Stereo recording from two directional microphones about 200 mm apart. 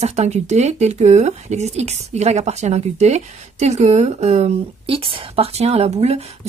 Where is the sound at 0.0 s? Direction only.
35° right (ahead or behind).